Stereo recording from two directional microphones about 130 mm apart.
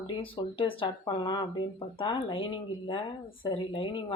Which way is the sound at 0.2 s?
45° left (ahead or behind).